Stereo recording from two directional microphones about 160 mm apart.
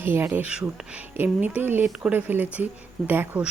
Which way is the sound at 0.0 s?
15° right (ahead or behind).